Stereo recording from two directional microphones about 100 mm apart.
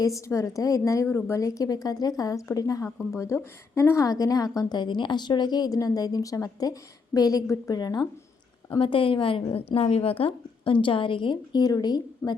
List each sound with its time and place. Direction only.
0.0 s a woman's voice: 30° left (ahead or behind)
8.7 s speech: 60° left (ahead or behind); by 12.4 s 45° left (ahead or behind)